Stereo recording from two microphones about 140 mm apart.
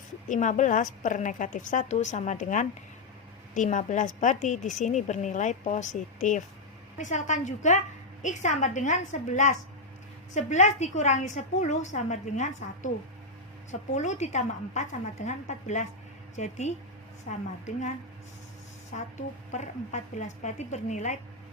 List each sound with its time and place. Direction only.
0.3 s a woman's voice: 60° left (ahead or behind)
18.9 s a woman's voice: 60° left (ahead or behind)